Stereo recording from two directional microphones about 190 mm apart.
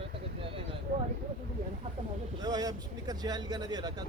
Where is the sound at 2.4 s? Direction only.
20° right (ahead or behind).